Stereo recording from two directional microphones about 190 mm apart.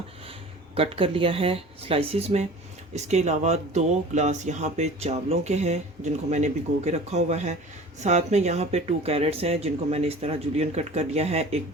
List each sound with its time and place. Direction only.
0.8 s speech: 30° right (ahead or behind)